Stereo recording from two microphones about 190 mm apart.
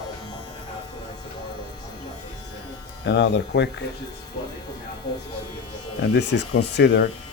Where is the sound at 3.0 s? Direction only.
65° left (ahead or behind).